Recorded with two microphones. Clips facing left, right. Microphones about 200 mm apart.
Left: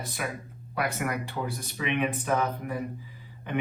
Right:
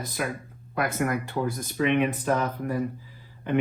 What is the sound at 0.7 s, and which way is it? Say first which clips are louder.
Speech: right 4 dB; 45° right (ahead or behind).